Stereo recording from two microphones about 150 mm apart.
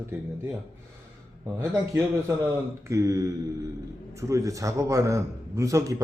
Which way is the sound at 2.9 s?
20° right (ahead or behind).